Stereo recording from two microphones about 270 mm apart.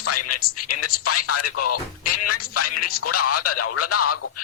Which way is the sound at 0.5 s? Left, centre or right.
Left.